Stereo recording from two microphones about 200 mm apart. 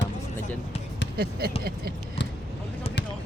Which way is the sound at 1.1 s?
50° right (ahead or behind).